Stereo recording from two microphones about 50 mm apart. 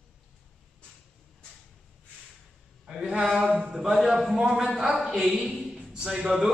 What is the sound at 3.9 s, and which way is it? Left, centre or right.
A man's voice, centre.